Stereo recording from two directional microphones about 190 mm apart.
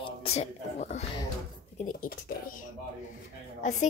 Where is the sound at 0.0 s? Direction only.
30° left (ahead or behind).